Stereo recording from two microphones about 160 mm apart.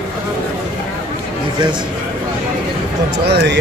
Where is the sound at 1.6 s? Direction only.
30° right (ahead or behind).